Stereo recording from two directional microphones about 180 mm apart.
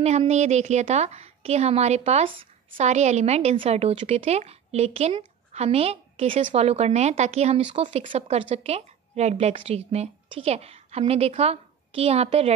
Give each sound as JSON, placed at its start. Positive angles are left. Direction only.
{"t": 0.0, "sound": "speech", "side_deg": -35}